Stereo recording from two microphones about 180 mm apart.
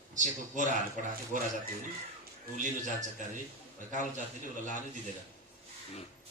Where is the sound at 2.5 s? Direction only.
45° right (ahead or behind).